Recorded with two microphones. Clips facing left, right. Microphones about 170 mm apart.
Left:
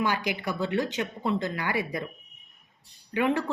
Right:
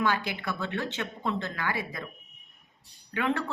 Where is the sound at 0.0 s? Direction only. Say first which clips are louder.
Left 1 dB; 15° left (ahead or behind).